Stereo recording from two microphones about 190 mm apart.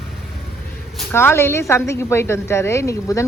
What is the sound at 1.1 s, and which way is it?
A woman's voice, 10° left (ahead or behind).